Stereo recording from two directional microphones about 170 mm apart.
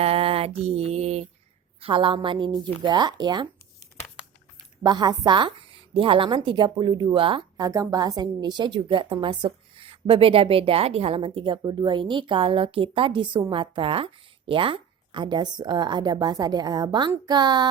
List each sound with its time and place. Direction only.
0.0 s mantra: 35° right (ahead or behind)
1.8 s a woman's voice: 30° right (ahead or behind)
4.8 s a woman's voice: 25° right (ahead or behind)